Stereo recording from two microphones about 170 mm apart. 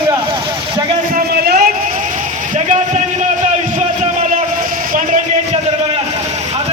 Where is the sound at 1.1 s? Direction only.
65° right (ahead or behind).